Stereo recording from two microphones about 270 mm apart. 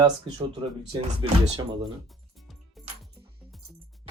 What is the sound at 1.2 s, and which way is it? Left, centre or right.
Speech, right.